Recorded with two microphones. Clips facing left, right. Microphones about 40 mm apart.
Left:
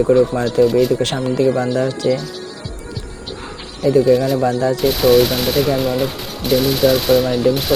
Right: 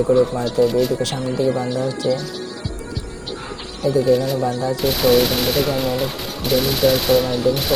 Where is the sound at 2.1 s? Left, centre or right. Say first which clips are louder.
Left 2 dB; centre.